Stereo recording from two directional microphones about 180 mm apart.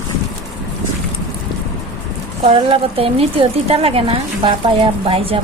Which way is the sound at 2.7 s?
30° right (ahead or behind).